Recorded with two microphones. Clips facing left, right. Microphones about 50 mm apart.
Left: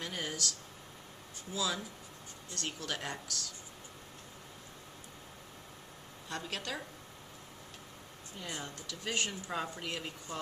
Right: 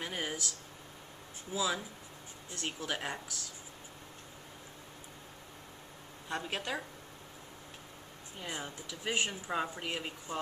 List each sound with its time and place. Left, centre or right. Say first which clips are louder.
0.0 s a sound: right 1 dB; centre
1.5 s speech: right 2 dB; centre
6.2 s speech: right 3 dB; centre
8.4 s speech: right 1 dB; centre